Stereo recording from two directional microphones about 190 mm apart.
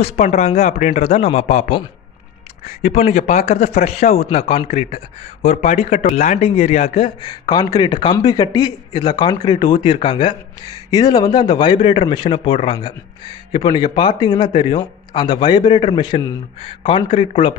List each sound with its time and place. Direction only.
0.0 s speech: 35° left (ahead or behind)